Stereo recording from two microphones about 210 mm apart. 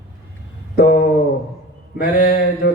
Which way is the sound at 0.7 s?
45° left (ahead or behind).